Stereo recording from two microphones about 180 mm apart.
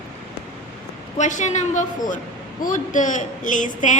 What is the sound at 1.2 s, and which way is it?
A woman's voice, 40° left (ahead or behind).